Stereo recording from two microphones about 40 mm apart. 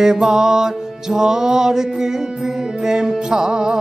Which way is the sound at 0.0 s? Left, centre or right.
Centre.